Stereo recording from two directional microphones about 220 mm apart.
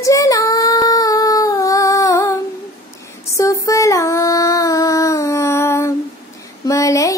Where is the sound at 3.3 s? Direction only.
15° left (ahead or behind).